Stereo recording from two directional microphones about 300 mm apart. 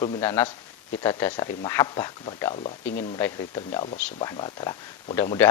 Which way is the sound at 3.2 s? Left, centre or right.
Centre.